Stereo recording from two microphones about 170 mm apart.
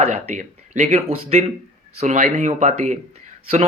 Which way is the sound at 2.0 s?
45° right (ahead or behind).